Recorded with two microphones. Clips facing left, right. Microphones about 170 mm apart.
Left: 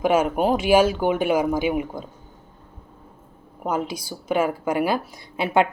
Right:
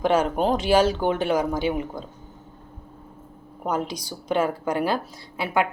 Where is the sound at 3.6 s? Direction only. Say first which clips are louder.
Left 1 dB; 10° left (ahead or behind).